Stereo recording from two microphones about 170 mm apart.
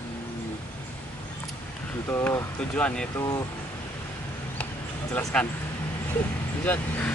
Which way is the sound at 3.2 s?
20° left (ahead or behind).